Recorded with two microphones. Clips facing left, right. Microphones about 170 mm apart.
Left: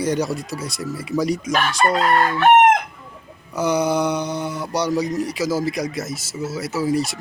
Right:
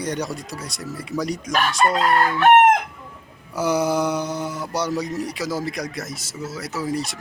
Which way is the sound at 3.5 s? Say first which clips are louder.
Left 1 dB; 5° right (ahead or behind).